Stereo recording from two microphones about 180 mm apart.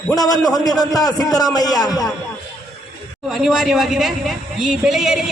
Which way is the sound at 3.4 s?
Centre (ahead or behind).